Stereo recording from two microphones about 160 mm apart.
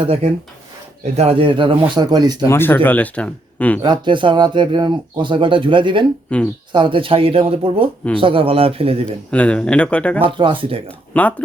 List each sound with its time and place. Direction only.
0.0 s speech: 35° right (ahead or behind)
2.5 s speech: 15° left (ahead or behind)
3.8 s speech: 30° right (ahead or behind)
6.3 s speech: 10° left (ahead or behind)
6.7 s speech: 30° right (ahead or behind)
9.3 s speech: 5° left (ahead or behind)
10.2 s speech: 30° right (ahead or behind)
10.8 s speech: 10° left (ahead or behind)